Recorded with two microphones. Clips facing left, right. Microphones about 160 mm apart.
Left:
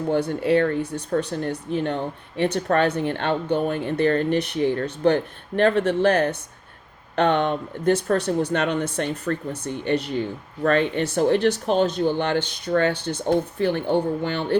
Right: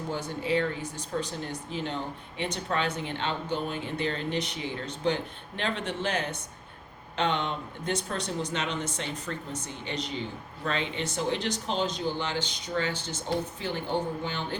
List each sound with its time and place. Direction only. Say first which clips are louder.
0.1 s speech: left 9 dB; 60° left (ahead or behind)